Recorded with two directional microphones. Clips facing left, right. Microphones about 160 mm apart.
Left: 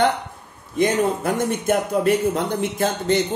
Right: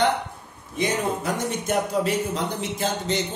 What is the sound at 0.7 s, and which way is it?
A woman's voice, 55° left (ahead or behind).